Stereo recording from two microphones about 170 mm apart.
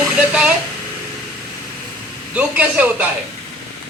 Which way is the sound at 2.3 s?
10° right (ahead or behind).